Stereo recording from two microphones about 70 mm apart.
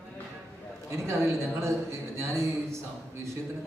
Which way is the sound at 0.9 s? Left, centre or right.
Right.